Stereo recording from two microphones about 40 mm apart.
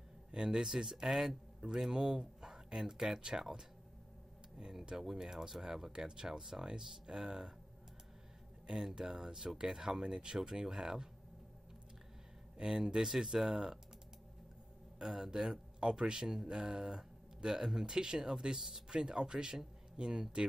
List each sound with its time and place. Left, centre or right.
0.3 s speech: right
4.6 s speech: centre
8.6 s speech: centre
12.5 s speech: centre
15.0 s speech: centre